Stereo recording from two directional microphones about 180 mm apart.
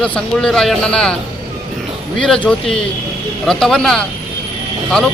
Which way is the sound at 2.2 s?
5° left (ahead or behind).